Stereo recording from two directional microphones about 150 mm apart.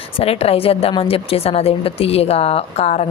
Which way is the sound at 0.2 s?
40° left (ahead or behind).